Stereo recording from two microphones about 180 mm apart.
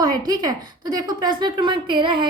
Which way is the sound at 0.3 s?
20° right (ahead or behind).